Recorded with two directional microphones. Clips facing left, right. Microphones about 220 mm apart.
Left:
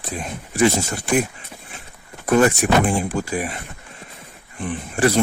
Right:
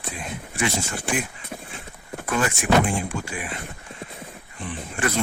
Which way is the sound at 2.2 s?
40° left (ahead or behind).